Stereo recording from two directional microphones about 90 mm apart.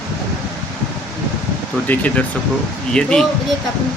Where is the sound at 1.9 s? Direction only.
15° left (ahead or behind).